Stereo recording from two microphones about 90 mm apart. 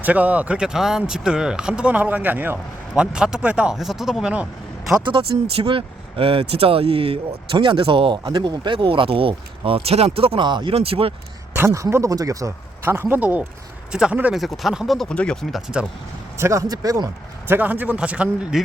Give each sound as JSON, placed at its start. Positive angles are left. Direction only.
{"t": 0.0, "sound": "speech", "side_deg": -15}
{"t": 4.9, "sound": "speech", "side_deg": -65}
{"t": 8.2, "sound": "speech", "side_deg": -50}
{"t": 10.4, "sound": "speech", "side_deg": -60}
{"t": 11.5, "sound": "speech", "side_deg": -35}
{"t": 12.8, "sound": "speech", "side_deg": -25}
{"t": 14.3, "sound": "speech", "side_deg": 0}
{"t": 15.1, "sound": "speech", "side_deg": 10}
{"t": 15.5, "sound": "speech", "side_deg": -10}
{"t": 16.4, "sound": "speech", "side_deg": -35}
{"t": 17.5, "sound": "speech", "side_deg": -20}